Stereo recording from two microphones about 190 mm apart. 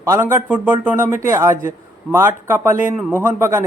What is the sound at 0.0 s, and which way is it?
A man's voice, 15° right (ahead or behind).